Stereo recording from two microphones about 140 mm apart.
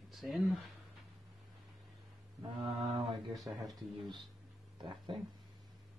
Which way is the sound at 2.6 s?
45° right (ahead or behind).